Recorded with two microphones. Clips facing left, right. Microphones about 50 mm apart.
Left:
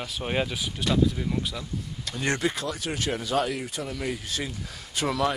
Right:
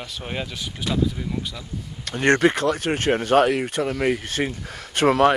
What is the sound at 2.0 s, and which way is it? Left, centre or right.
Speech, right.